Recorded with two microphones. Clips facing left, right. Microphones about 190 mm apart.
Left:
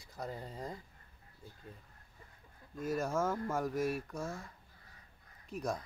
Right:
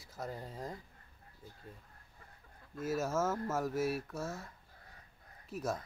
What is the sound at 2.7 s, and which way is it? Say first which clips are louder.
Speech: even; 5° right (ahead or behind).